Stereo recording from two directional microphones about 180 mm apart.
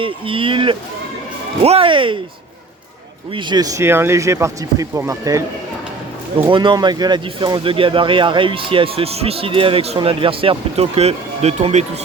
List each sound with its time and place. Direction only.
0.0 s speech: 30° right (ahead or behind)
3.3 s speech: 20° right (ahead or behind)
6.5 s speech: 25° right (ahead or behind)